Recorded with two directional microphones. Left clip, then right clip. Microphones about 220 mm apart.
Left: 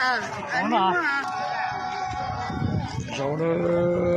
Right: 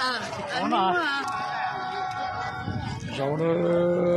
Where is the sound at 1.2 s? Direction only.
50° left (ahead or behind).